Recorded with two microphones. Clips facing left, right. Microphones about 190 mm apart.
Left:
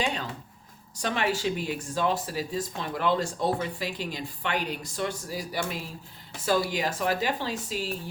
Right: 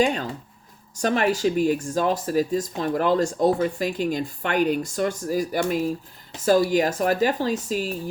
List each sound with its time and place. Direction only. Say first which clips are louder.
0.0 s speech: right 8 dB; 45° right (ahead or behind)